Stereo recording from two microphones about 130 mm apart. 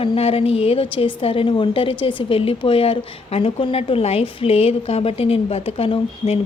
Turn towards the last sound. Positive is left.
turn(degrees=50)  # may be behind; listen again after turning